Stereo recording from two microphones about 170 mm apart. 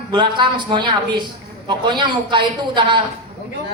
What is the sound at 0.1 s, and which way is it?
A woman's voice, 30° right (ahead or behind).